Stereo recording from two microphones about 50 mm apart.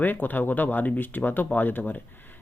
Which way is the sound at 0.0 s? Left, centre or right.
Left.